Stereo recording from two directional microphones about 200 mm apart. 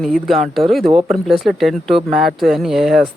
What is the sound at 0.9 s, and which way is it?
Speech, 25° right (ahead or behind).